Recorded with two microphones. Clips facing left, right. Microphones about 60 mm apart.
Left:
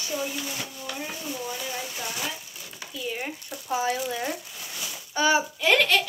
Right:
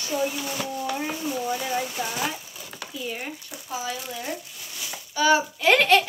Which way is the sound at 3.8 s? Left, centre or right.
Left.